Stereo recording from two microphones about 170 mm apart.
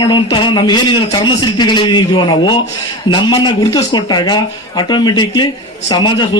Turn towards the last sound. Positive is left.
turn(degrees=25)  # may be behind; listen again after turning